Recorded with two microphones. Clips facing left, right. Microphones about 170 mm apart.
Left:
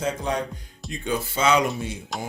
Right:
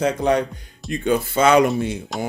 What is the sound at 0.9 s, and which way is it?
Speech, 55° right (ahead or behind).